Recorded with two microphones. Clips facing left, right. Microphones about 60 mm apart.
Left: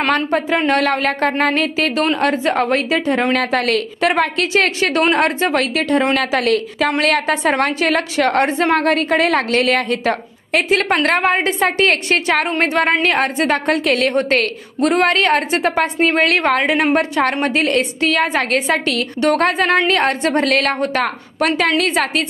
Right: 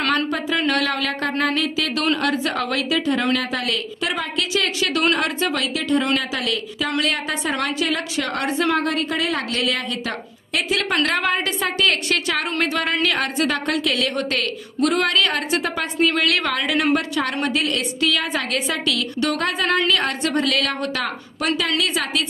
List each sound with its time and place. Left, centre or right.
0.1 s a woman's voice: left
2.1 s a woman's voice: left
3.3 s a woman's voice: left
7.0 s a woman's voice: left
7.5 s a woman's voice: left